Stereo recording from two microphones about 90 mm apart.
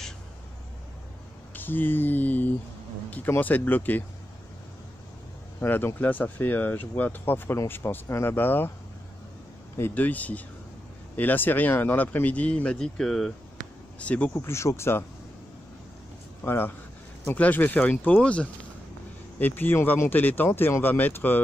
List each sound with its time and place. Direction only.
1.5 s a sound: 20° left (ahead or behind)
3.1 s speech: 20° left (ahead or behind)
5.6 s speech: 25° left (ahead or behind)
9.8 s speech: 25° left (ahead or behind)
14.4 s speech: 30° left (ahead or behind)
16.4 s speech: 25° left (ahead or behind)